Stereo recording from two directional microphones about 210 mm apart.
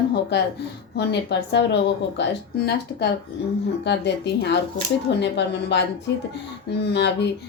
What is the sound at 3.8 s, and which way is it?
A woman's voice, 55° left (ahead or behind).